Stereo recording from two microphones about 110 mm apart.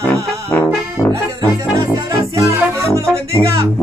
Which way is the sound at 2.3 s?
30° right (ahead or behind).